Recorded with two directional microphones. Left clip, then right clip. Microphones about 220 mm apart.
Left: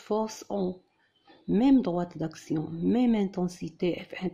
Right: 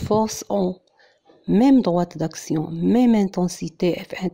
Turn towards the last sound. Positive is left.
turn(degrees=-45)  # may be behind; listen again after turning